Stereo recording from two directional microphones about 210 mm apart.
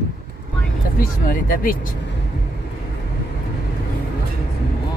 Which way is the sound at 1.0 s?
40° left (ahead or behind).